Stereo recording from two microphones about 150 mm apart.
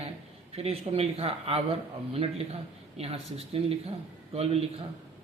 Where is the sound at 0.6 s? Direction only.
40° right (ahead or behind).